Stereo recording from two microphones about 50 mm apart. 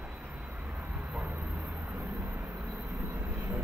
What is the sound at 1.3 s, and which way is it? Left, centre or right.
Vehicle, right.